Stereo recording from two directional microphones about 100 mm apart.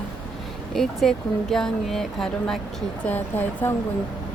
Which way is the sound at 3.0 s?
20° left (ahead or behind).